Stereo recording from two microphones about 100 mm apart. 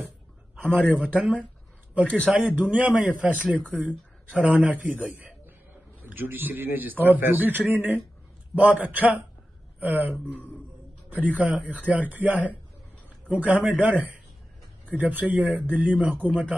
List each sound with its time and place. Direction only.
0.6 s a man's voice: 15° right (ahead or behind)
10.1 s speech: 15° left (ahead or behind)
11.1 s speech: 15° right (ahead or behind)